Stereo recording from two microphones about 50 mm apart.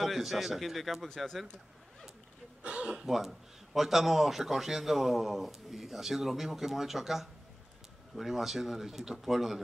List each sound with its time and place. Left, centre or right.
0.0 s a man's voice: centre
2.6 s speech: centre
3.1 s a man's voice: centre